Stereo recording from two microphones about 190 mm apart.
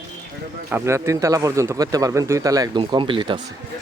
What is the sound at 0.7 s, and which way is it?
Speech, 15° right (ahead or behind).